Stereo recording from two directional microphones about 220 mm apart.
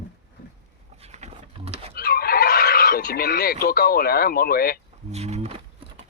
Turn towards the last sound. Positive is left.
turn(degrees=-30)  # may be behind; listen again after turning